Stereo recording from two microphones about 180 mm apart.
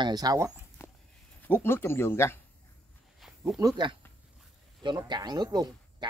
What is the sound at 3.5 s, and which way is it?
Speech, 20° right (ahead or behind).